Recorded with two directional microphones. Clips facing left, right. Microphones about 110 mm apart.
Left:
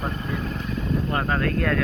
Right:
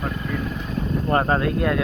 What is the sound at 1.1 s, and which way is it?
Speech, 35° right (ahead or behind).